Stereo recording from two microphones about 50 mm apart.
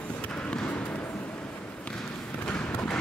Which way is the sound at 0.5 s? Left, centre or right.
Left.